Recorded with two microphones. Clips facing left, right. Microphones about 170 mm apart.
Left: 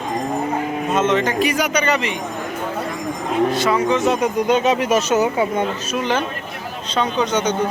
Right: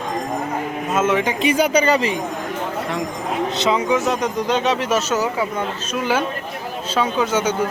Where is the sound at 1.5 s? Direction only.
30° right (ahead or behind).